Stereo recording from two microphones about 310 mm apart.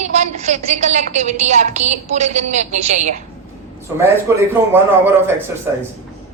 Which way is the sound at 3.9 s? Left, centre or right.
Centre.